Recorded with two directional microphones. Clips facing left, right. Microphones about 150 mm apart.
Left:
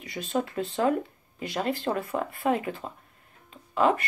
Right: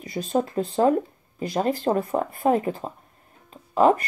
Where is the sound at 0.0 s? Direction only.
35° right (ahead or behind).